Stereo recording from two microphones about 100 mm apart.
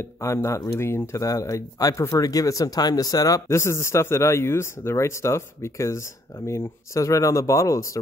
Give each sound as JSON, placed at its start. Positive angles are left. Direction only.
{"t": 0.0, "sound": "speech", "side_deg": 30}